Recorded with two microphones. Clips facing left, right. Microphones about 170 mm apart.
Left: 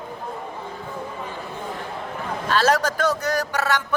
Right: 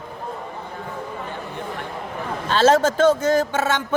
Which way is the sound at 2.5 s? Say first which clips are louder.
Right 4 dB; 25° right (ahead or behind).